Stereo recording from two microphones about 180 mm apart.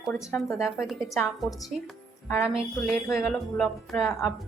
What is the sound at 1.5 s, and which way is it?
Speech, 20° left (ahead or behind).